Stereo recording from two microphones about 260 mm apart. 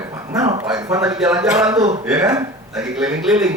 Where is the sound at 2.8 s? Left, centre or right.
Centre.